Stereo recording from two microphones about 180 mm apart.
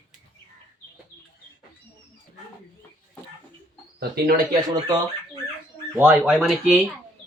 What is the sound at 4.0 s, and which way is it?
Speech, 60° right (ahead or behind).